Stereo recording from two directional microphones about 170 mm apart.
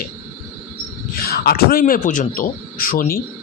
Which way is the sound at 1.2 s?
65° left (ahead or behind).